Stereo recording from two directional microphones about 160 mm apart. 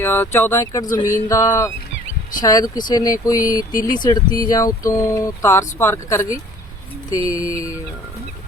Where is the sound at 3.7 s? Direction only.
60° left (ahead or behind).